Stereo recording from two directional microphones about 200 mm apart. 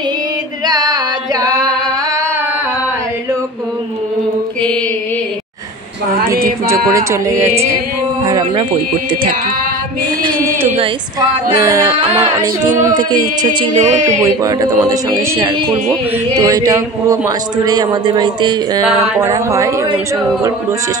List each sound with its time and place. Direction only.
0.7 s singing: 20° right (ahead or behind)
6.4 s a man's voice: 15° right (ahead or behind)
10.8 s speech: 20° right (ahead or behind)
12.9 s a man's voice: 20° right (ahead or behind)
13.7 s speech: 40° right (ahead or behind)
14.2 s a man's voice: 15° right (ahead or behind)